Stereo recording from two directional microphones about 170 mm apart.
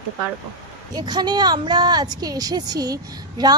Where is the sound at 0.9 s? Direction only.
25° right (ahead or behind).